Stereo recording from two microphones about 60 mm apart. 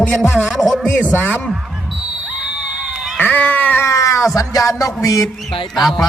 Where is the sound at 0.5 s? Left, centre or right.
Centre.